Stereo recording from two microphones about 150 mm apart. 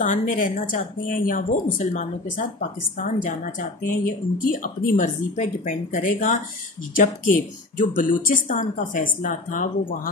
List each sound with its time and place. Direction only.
0.0 s speech: 55° left (ahead or behind)